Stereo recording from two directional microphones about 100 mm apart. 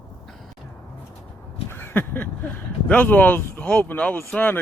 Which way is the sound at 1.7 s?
20° left (ahead or behind).